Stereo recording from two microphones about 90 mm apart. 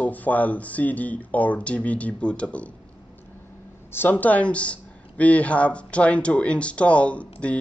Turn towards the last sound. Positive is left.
turn(degrees=15)  # may be behind; listen again after turning